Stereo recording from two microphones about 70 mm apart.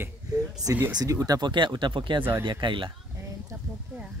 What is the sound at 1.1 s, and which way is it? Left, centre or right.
Speech, right.